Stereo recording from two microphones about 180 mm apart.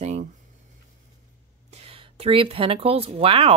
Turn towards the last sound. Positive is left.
turn(degrees=-30)  # may be behind; listen again after turning